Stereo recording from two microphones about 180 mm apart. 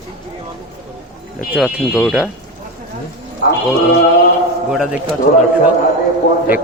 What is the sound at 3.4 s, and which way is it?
Speech, 60° left (ahead or behind).